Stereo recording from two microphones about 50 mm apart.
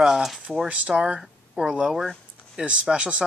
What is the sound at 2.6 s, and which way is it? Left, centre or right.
Speech, centre.